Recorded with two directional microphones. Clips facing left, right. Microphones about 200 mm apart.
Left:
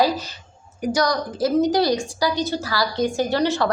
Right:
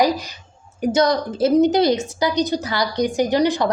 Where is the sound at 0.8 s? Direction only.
25° right (ahead or behind).